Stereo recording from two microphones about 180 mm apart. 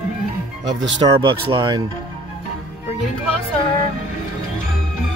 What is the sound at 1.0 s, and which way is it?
Speech, 25° right (ahead or behind).